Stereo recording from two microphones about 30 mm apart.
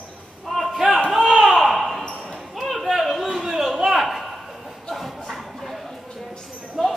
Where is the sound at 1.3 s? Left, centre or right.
Centre.